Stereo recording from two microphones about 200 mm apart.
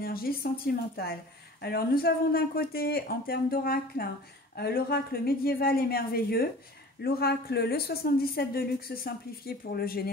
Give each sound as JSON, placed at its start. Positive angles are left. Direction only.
{"t": 0.0, "sound": "a woman's voice", "side_deg": 50}
{"t": 1.6, "sound": "speech", "side_deg": 50}